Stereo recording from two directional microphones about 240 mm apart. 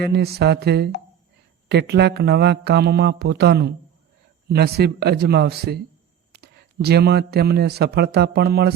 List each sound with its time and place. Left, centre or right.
0.0 s a man's voice: right